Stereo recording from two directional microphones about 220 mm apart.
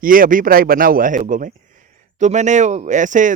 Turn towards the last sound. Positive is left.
turn(degrees=-35)  # may be behind; listen again after turning